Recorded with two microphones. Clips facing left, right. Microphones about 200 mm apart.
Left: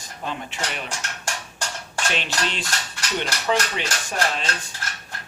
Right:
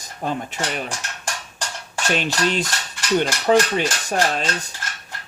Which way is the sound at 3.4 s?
40° right (ahead or behind).